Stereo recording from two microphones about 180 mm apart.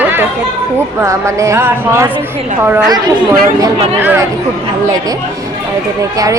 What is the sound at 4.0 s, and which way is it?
Speech, 10° right (ahead or behind).